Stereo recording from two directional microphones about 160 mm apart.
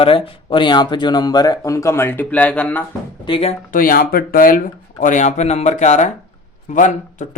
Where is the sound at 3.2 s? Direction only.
35° left (ahead or behind).